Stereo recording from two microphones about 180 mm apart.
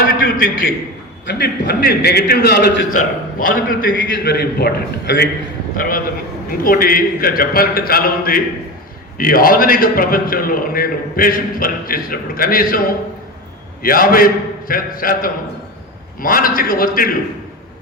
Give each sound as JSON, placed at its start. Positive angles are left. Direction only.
{"t": 0.0, "sound": "a man's voice", "side_deg": 50}
{"t": 1.3, "sound": "a man's voice", "side_deg": 65}
{"t": 3.3, "sound": "a man's voice", "side_deg": 50}
{"t": 5.7, "sound": "a man's voice", "side_deg": 50}
{"t": 13.8, "sound": "a man's voice", "side_deg": 55}